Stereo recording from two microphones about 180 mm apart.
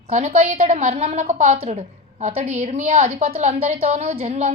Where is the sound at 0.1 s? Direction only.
35° right (ahead or behind).